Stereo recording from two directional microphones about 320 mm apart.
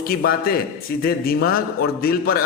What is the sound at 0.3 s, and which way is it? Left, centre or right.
A man's voice, left.